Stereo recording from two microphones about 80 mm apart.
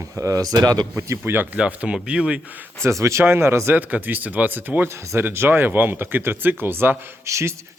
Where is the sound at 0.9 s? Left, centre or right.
Right.